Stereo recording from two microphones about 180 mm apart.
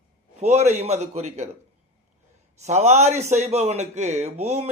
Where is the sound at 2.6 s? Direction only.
40° right (ahead or behind).